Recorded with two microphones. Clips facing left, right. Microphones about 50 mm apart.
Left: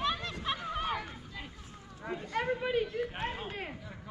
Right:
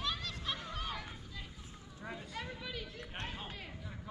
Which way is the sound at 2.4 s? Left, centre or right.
Left.